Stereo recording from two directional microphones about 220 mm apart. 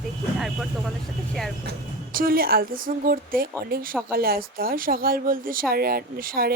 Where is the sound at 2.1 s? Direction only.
40° right (ahead or behind).